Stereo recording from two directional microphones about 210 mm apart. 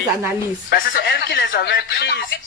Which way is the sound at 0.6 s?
50° left (ahead or behind).